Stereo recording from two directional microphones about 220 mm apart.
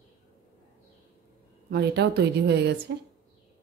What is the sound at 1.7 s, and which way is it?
Speech, 50° right (ahead or behind).